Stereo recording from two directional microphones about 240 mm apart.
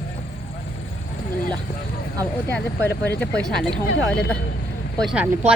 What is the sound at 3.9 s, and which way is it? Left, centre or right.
Speech, left.